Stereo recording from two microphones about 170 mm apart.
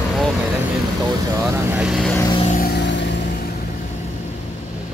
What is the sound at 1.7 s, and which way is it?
Speech, centre (ahead or behind).